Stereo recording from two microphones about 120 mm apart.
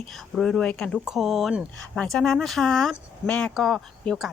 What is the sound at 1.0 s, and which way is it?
Speech, 5° right (ahead or behind).